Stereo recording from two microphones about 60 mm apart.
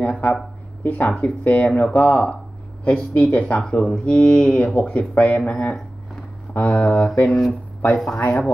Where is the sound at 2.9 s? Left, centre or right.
Left.